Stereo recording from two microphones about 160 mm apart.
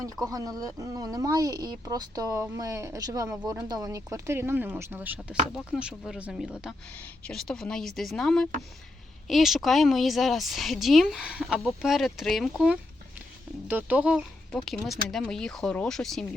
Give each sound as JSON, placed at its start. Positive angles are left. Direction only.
{"t": 0.3, "sound": "speech", "side_deg": -20}
{"t": 5.5, "sound": "speech", "side_deg": 0}
{"t": 6.9, "sound": "speech", "side_deg": 5}